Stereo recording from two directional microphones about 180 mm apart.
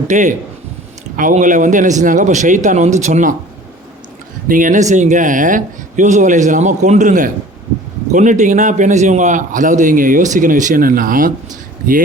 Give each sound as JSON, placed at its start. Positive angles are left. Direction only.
{"t": 0.1, "sound": "a man's voice", "side_deg": -40}
{"t": 4.4, "sound": "a man's voice", "side_deg": -45}